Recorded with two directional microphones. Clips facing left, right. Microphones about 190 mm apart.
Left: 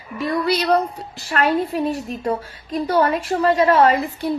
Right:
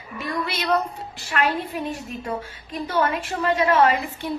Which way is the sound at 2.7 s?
40° left (ahead or behind).